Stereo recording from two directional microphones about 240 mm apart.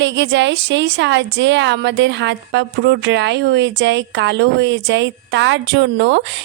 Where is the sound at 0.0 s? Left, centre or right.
Right.